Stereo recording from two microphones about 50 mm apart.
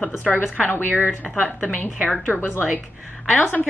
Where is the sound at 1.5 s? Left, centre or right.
Left.